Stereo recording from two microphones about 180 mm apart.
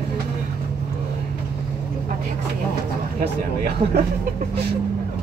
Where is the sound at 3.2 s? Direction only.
60° right (ahead or behind).